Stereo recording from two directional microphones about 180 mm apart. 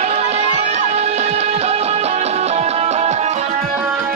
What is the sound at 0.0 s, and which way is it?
Music, 40° right (ahead or behind).